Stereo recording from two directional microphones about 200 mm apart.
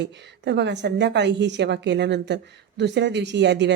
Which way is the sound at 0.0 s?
60° right (ahead or behind).